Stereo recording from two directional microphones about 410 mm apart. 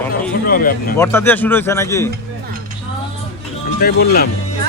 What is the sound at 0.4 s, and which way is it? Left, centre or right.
Speech, left.